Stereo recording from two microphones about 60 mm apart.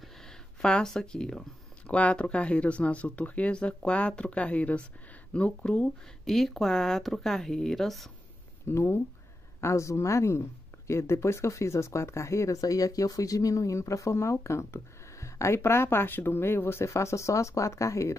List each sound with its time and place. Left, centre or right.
0.0 s a sound: centre
1.9 s speech: left
6.2 s speech: centre
8.6 s speech: left